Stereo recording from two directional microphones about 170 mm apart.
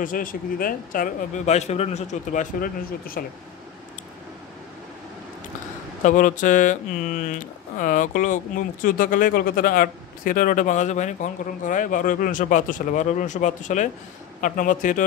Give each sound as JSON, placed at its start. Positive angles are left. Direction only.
{"t": 0.0, "sound": "speech", "side_deg": 55}
{"t": 3.2, "sound": "speech", "side_deg": 60}
{"t": 6.0, "sound": "speech", "side_deg": 50}